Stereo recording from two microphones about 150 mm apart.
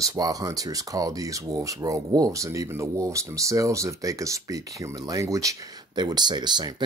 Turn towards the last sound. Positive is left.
turn(degrees=-30)  # may be behind; listen again after turning